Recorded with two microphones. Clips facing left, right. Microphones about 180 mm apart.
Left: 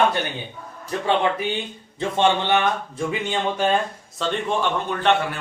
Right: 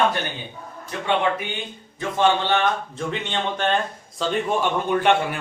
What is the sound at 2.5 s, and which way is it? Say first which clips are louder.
Speech: left 1 dB; 10° left (ahead or behind).